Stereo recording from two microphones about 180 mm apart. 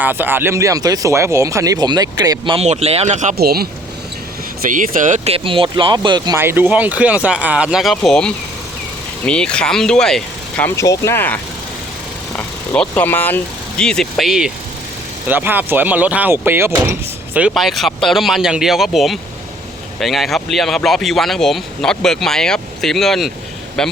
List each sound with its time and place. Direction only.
0.0 s speech: 10° right (ahead or behind)
2.6 s speech: 35° right (ahead or behind)
3.3 s speech: 60° right (ahead or behind)
4.7 s speech: 45° right (ahead or behind); by 6.4 s 25° right (ahead or behind)
6.4 s speech: 10° right (ahead or behind)
10.8 s speech: 15° left (ahead or behind)
12.4 s speech: 10° left (ahead or behind)